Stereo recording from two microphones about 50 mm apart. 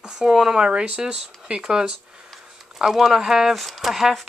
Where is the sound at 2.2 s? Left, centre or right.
Centre.